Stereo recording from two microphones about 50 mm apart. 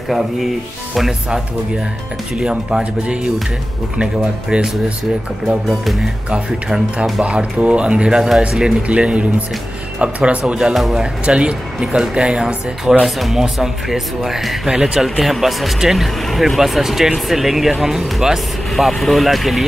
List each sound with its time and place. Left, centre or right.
2.3 s speech: centre
5.7 s speech: centre
6.3 s speech: centre
10.7 s speech: centre
11.2 s speech: right
13.0 s speech: centre